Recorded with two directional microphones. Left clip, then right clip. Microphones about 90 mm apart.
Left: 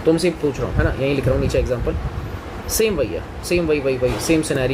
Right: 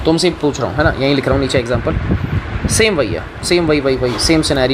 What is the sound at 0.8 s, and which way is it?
Speech, 40° right (ahead or behind).